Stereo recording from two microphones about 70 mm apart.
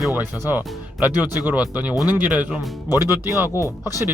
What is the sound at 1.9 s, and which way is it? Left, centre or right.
Speech, left.